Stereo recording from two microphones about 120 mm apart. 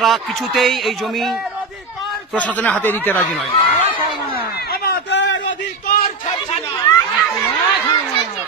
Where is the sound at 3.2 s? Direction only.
Centre (ahead or behind).